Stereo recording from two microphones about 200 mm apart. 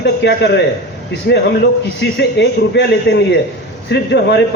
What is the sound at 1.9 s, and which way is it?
A man's voice, 60° left (ahead or behind).